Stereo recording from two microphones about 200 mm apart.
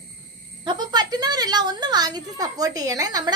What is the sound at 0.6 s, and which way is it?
A woman's voice, 20° right (ahead or behind).